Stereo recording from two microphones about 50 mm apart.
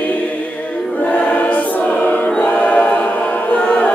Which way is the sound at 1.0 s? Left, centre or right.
Left.